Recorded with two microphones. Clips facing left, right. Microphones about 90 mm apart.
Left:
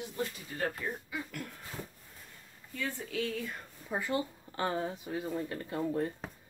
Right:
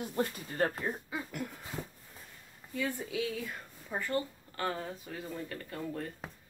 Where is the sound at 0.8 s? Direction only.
35° right (ahead or behind).